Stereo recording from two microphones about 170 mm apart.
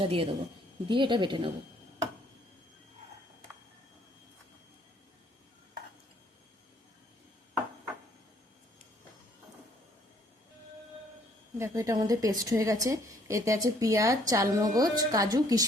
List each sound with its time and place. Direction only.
0.0 s a woman's voice: 30° right (ahead or behind)
11.5 s a woman's voice: 15° right (ahead or behind)